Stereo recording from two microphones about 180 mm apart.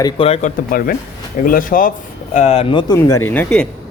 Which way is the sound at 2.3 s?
35° left (ahead or behind).